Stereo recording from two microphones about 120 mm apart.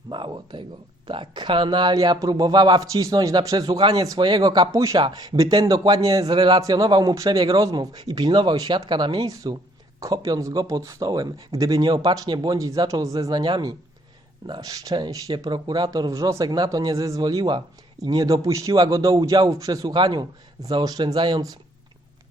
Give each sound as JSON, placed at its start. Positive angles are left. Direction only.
{"t": 0.1, "sound": "a sound", "side_deg": -40}
{"t": 1.0, "sound": "a man's voice", "side_deg": -40}
{"t": 19.9, "sound": "a man's voice", "side_deg": -40}